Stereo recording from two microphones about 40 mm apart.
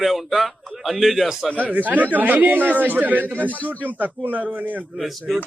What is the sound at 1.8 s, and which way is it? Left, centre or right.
Speech, right.